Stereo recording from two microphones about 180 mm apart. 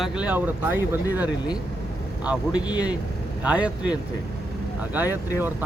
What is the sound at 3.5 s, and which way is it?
Speech, 5° right (ahead or behind).